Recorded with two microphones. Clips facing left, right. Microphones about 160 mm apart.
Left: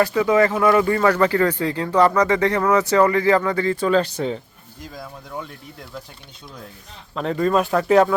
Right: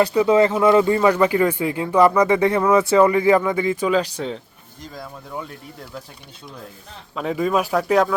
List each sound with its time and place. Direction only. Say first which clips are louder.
0.0 s speech: right 1 dB; 20° right (ahead or behind); by 6.0 s centre (ahead or behind)
7.2 s speech: left 1 dB; 5° right (ahead or behind)